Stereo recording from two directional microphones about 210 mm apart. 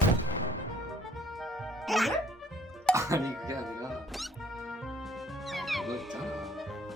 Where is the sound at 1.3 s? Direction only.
Centre (ahead or behind).